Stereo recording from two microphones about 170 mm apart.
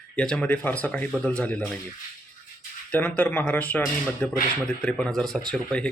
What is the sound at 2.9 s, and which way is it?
Speech, 10° left (ahead or behind).